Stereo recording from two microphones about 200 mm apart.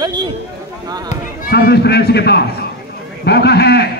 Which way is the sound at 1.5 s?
50° left (ahead or behind).